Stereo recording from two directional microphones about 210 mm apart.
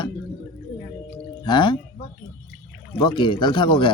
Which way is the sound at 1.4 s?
20° left (ahead or behind).